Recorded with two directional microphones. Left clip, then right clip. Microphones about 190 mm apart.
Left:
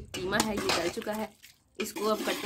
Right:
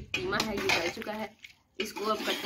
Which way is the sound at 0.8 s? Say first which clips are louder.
Left 1 dB; 35° left (ahead or behind).